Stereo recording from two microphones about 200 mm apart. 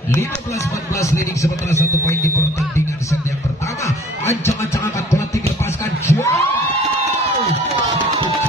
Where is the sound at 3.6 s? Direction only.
15° left (ahead or behind).